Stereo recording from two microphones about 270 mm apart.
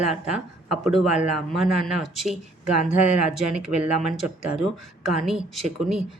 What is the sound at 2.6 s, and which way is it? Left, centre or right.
Speech, right.